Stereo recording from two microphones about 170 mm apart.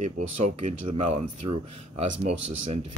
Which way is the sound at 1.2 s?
40° right (ahead or behind).